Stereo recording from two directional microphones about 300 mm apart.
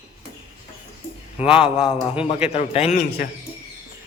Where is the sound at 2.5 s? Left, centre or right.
Left.